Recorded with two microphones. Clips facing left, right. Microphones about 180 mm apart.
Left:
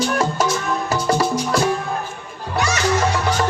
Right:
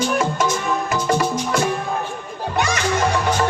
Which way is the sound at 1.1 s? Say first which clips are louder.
Left 1 dB; 35° left (ahead or behind).